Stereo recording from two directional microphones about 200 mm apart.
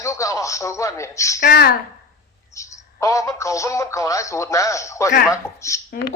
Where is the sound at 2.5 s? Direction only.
15° left (ahead or behind).